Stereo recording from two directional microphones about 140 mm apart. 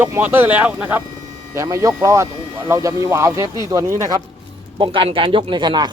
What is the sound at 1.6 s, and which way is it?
Speech, 20° right (ahead or behind).